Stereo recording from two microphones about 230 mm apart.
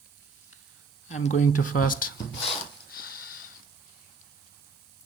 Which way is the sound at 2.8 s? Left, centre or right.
Left.